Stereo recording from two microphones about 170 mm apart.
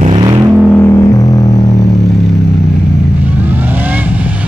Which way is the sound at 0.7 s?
20° left (ahead or behind).